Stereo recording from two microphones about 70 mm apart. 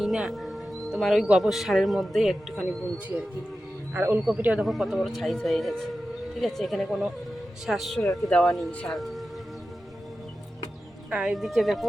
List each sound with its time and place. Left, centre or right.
0.0 s speech: centre
3.9 s speech: right
4.4 s speech: right
4.6 s speech: centre
8.3 s speech: centre
8.9 s speech: centre
11.1 s speech: centre